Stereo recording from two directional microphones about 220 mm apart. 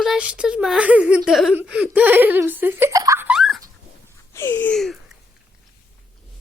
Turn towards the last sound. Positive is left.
turn(degrees=5)  # may be behind; listen again after turning